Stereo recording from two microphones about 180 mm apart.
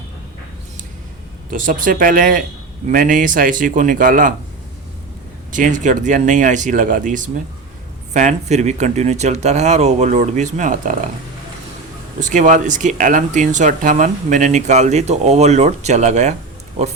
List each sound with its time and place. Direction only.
1.5 s speech: 50° right (ahead or behind)
5.5 s speech: 45° right (ahead or behind)
12.2 s speech: 45° right (ahead or behind)